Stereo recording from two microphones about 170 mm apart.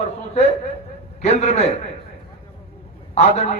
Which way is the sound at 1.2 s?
40° left (ahead or behind).